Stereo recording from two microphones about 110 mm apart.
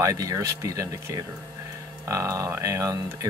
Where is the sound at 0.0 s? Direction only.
30° right (ahead or behind).